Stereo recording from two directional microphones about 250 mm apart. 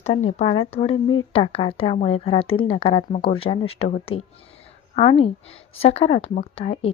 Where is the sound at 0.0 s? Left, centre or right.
Left.